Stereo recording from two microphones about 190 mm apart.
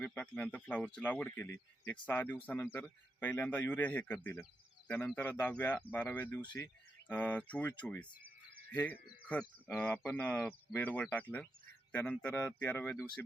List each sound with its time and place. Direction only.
0.0 s speech: 10° left (ahead or behind)